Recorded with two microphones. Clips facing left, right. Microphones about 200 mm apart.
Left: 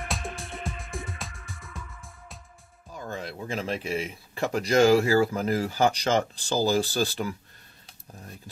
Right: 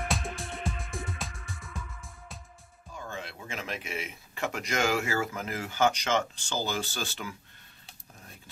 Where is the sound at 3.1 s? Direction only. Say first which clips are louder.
Left 8 dB; 40° left (ahead or behind).